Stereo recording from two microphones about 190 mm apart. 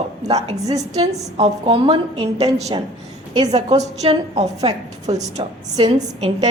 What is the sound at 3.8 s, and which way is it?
A woman's voice, 35° right (ahead or behind).